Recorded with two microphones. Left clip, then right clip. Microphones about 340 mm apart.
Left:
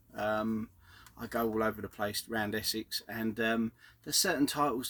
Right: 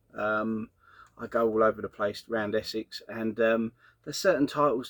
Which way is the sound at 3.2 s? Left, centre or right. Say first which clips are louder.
Right 8 dB; left.